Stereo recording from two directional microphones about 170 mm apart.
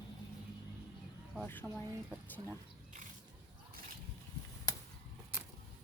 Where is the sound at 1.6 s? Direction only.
Centre (ahead or behind).